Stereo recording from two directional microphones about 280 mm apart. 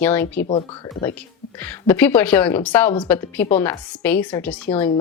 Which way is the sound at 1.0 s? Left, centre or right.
Centre.